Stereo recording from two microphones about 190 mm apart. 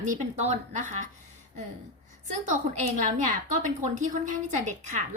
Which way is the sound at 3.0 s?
40° right (ahead or behind).